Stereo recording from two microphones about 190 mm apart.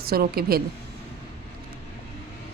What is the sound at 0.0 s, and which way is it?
Speech, 55° right (ahead or behind).